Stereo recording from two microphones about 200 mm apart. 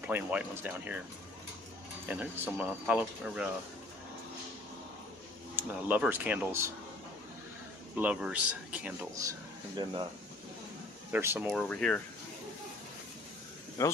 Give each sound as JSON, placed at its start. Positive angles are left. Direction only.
{"t": 0.0, "sound": "speech", "side_deg": -10}
{"t": 2.0, "sound": "speech", "side_deg": -10}
{"t": 5.6, "sound": "speech", "side_deg": -10}
{"t": 7.9, "sound": "speech", "side_deg": -5}
{"t": 11.1, "sound": "speech", "side_deg": -10}
{"t": 11.7, "sound": "speech", "side_deg": 5}
{"t": 13.8, "sound": "speech", "side_deg": 15}